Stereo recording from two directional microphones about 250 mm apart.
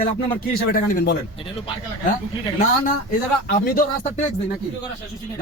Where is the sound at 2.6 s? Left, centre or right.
Left.